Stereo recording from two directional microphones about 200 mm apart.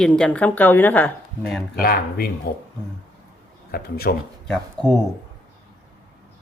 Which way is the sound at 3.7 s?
50° left (ahead or behind).